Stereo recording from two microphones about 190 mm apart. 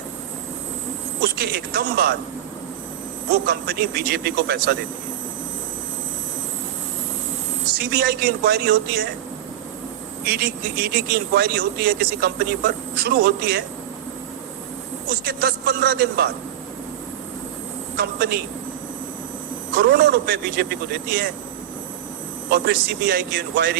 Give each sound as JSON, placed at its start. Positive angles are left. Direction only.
{"t": 1.4, "sound": "speech", "side_deg": -55}
{"t": 3.4, "sound": "speech", "side_deg": -55}
{"t": 7.8, "sound": "speech", "side_deg": -55}
{"t": 10.2, "sound": "speech", "side_deg": -55}
{"t": 15.1, "sound": "speech", "side_deg": -55}
{"t": 17.9, "sound": "a man's voice", "side_deg": -55}
{"t": 19.7, "sound": "speech", "side_deg": -55}
{"t": 22.5, "sound": "speech", "side_deg": -55}